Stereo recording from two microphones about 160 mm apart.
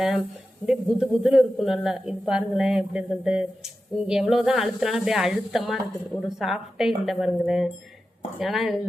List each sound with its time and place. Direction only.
0.6 s speech: 5° right (ahead or behind)